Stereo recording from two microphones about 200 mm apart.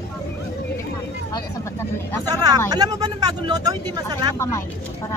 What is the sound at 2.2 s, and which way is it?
Speech, 20° right (ahead or behind).